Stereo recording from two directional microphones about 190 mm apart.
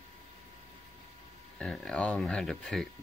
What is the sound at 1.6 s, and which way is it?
Speech, 5° left (ahead or behind).